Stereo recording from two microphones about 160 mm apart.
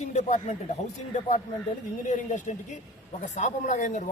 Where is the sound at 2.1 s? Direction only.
50° left (ahead or behind).